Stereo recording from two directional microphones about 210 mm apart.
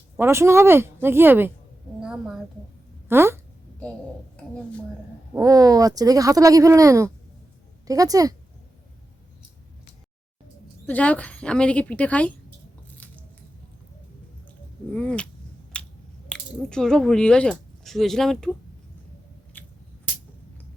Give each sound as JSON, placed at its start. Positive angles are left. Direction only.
{"t": 0.2, "sound": "speech", "side_deg": -10}
{"t": 2.0, "sound": "a sound", "side_deg": -5}
{"t": 3.1, "sound": "speech", "side_deg": -10}
{"t": 5.3, "sound": "speech", "side_deg": -15}
{"t": 10.8, "sound": "speech", "side_deg": 5}
{"t": 14.9, "sound": "a sound", "side_deg": 5}
{"t": 15.7, "sound": "finger snapping", "side_deg": 5}
{"t": 16.3, "sound": "speech", "side_deg": 5}
{"t": 19.6, "sound": "scissors", "side_deg": 10}